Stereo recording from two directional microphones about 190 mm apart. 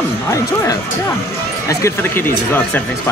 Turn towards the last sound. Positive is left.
turn(degrees=10)  # may be behind; listen again after turning